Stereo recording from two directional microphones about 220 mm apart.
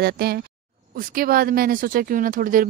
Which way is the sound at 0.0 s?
45° right (ahead or behind).